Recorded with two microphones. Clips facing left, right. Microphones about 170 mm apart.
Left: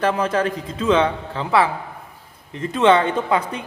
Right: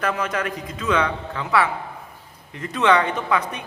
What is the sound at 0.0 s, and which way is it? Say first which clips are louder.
A man's voice: left 5 dB; 30° left (ahead or behind).